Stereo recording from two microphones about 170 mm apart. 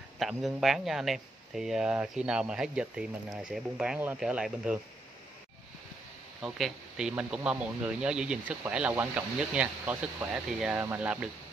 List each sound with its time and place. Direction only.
0.2 s speech: centre (ahead or behind)
6.4 s speech: 5° right (ahead or behind)